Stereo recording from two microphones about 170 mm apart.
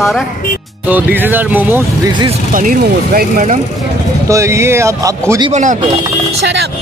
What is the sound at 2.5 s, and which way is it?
Speech, 55° right (ahead or behind).